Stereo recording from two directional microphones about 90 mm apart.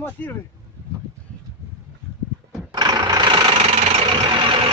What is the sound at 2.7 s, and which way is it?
Vehicle, 50° right (ahead or behind).